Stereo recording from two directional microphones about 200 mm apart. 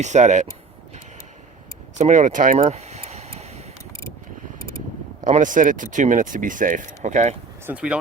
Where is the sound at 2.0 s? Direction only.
35° right (ahead or behind).